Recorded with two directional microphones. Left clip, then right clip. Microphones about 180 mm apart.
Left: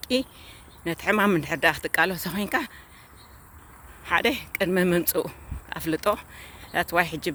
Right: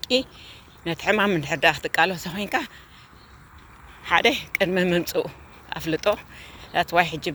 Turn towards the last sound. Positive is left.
turn(degrees=35)  # may be behind; listen again after turning